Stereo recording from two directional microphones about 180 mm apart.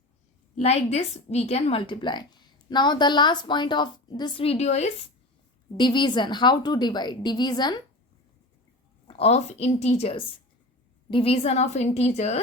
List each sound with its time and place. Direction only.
0.5 s a woman's voice: 35° left (ahead or behind)
5.7 s a woman's voice: 25° left (ahead or behind)
9.0 s a woman's voice: 35° left (ahead or behind)